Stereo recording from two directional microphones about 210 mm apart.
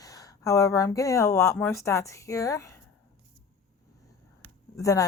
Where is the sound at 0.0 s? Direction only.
15° left (ahead or behind).